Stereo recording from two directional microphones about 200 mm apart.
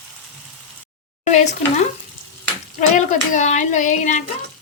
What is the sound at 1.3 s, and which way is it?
Speech, 35° left (ahead or behind).